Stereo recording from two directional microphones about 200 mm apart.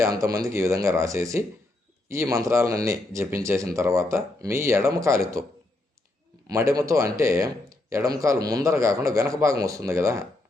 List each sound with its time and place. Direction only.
0.0 s speech: 15° right (ahead or behind)
6.5 s speech: 15° right (ahead or behind)